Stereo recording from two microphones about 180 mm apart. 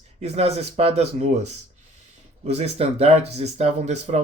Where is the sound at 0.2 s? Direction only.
35° right (ahead or behind).